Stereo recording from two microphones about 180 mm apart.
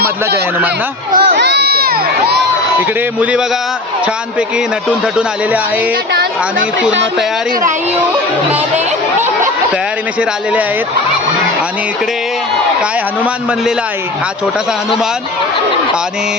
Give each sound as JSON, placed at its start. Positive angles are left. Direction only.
{"t": 0.0, "sound": "speech", "side_deg": -60}
{"t": 1.1, "sound": "crowd", "side_deg": -70}
{"t": 10.2, "sound": "a man's voice", "side_deg": -5}